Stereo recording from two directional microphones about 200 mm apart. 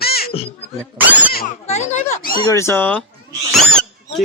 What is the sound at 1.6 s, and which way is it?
Speech, 35° left (ahead or behind).